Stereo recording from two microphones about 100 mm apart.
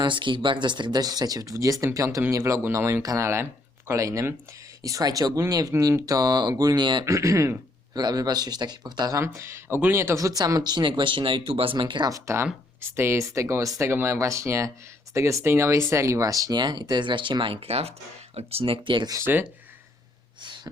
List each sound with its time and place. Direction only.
0.0 s speech: 55° right (ahead or behind)
7.0 s speech: 30° right (ahead or behind)
9.2 s speech: 30° right (ahead or behind); by 12.0 s 55° right (ahead or behind)
12.0 s speech: 30° right (ahead or behind); by 17.9 s 90° right
18.3 s speech: 75° right (ahead or behind); by 19.0 s 55° right (ahead or behind)
19.0 s speech: 35° right (ahead or behind)